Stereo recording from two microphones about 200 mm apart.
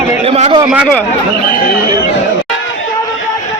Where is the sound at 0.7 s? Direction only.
5° left (ahead or behind).